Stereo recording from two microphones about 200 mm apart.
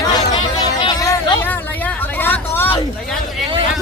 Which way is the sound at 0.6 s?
20° left (ahead or behind).